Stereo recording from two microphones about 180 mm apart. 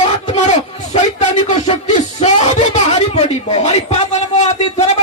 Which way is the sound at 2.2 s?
40° left (ahead or behind).